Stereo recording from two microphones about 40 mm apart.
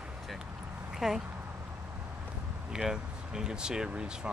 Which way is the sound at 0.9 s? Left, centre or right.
Centre.